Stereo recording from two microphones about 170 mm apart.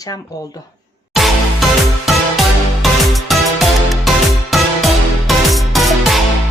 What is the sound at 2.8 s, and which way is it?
Music, centre (ahead or behind).